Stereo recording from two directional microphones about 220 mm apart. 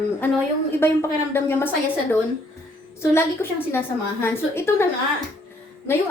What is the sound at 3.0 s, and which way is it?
A woman's voice, 10° left (ahead or behind).